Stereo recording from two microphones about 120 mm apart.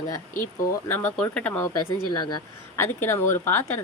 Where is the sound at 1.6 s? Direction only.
35° left (ahead or behind).